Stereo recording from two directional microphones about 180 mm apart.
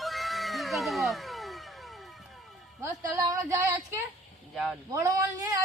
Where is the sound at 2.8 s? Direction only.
15° right (ahead or behind).